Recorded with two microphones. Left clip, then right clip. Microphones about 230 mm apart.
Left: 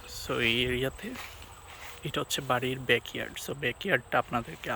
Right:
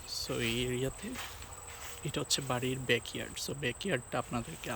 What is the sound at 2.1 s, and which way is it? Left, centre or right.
Speech, centre.